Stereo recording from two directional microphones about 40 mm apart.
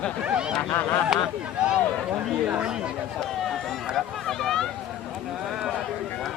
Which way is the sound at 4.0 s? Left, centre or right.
Centre.